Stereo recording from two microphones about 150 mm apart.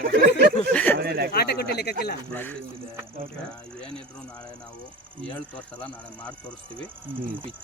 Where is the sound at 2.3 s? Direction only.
15° left (ahead or behind).